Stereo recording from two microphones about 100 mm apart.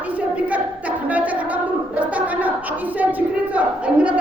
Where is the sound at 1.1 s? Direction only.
15° right (ahead or behind).